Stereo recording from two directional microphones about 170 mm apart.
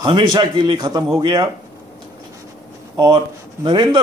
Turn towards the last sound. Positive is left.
turn(degrees=-25)  # may be behind; listen again after turning